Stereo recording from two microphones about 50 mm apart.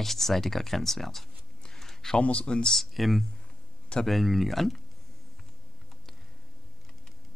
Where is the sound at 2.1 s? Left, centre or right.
Left.